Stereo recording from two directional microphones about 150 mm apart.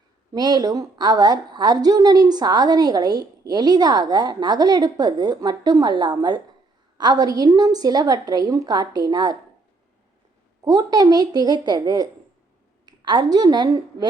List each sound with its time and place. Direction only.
0.3 s a woman's voice: 25° right (ahead or behind)
10.6 s a woman's voice: 25° right (ahead or behind)